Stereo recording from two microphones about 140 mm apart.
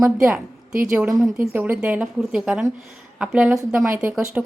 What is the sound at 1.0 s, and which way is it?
A woman's voice, 20° right (ahead or behind).